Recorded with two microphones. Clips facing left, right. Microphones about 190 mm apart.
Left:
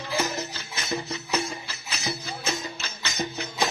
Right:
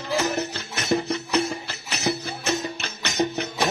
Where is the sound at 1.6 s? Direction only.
70° right (ahead or behind).